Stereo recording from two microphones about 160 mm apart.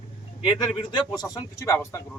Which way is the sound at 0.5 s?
30° left (ahead or behind).